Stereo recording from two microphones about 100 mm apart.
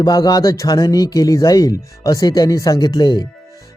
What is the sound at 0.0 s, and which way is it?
Music, 40° left (ahead or behind).